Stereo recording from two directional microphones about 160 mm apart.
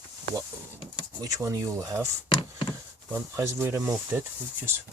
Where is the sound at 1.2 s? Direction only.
20° right (ahead or behind).